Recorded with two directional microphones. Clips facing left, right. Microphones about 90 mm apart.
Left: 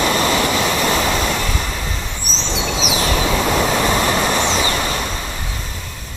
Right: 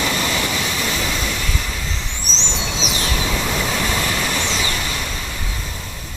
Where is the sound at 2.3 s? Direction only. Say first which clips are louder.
Left 2 dB; 45° left (ahead or behind).